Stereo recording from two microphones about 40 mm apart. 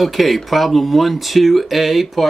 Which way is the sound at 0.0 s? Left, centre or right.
Centre.